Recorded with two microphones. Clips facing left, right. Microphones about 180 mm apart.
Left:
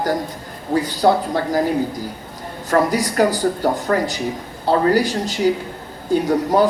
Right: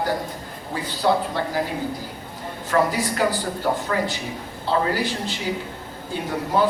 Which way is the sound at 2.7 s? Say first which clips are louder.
Left 4 dB; 40° left (ahead or behind).